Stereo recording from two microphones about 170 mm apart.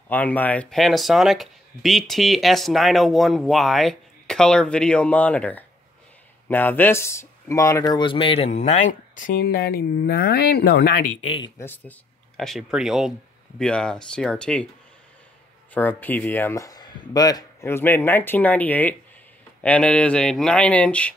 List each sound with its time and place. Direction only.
0.1 s speech: 10° left (ahead or behind); by 10.9 s 75° left (ahead or behind)
11.2 s speech: 30° left (ahead or behind)
12.4 s speech: centre (ahead or behind)
15.7 s speech: 10° left (ahead or behind)